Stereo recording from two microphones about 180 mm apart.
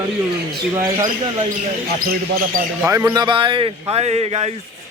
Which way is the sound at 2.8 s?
15° right (ahead or behind).